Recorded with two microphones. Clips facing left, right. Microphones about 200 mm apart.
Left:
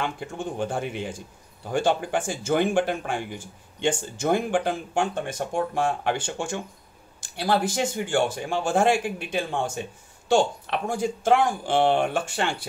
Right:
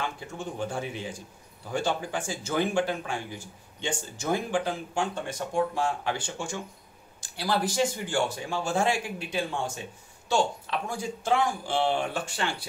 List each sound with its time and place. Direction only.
0.0 s speech: 55° left (ahead or behind)